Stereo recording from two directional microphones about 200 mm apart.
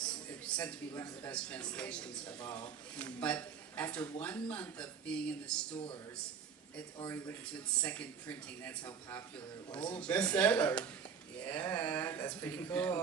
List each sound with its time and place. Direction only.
0.0 s speech: 5° left (ahead or behind)
5.7 s speech: 25° left (ahead or behind)
7.8 s speech: 5° left (ahead or behind)